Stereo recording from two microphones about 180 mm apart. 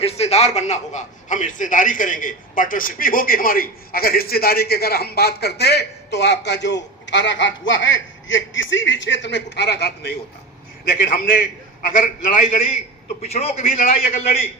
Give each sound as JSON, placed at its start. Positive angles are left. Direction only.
{"t": 0.0, "sound": "a man's voice", "side_deg": 35}
{"t": 11.0, "sound": "a man's voice", "side_deg": 50}
{"t": 13.2, "sound": "a man's voice", "side_deg": 35}
{"t": 13.6, "sound": "a man's voice", "side_deg": 55}